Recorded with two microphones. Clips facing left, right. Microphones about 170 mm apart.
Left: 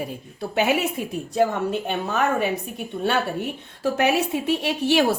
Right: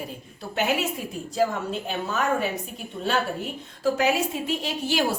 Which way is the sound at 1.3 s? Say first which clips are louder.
Left 4 dB; 60° left (ahead or behind).